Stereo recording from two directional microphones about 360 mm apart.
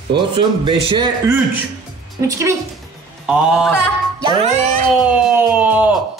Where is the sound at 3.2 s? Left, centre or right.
Centre.